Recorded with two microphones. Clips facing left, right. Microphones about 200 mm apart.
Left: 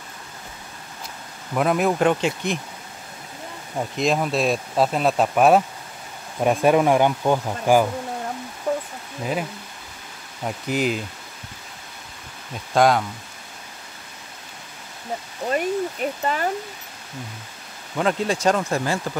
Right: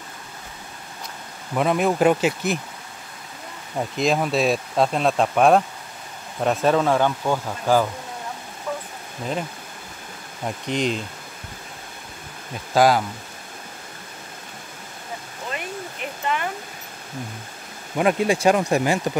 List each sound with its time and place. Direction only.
1.5 s speech: centre (ahead or behind)
3.7 s speech: centre (ahead or behind)
8.7 s a sound: 35° left (ahead or behind)
10.4 s speech: 5° left (ahead or behind)
12.7 s speech: 5° right (ahead or behind)
15.4 s a sound: 40° left (ahead or behind)
17.9 s speech: 10° right (ahead or behind)